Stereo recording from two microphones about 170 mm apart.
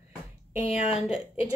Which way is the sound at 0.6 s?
35° left (ahead or behind).